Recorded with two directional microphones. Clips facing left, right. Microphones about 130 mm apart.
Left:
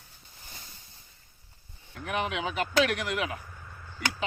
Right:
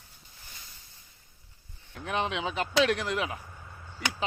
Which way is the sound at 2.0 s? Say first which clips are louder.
Even; 30° right (ahead or behind).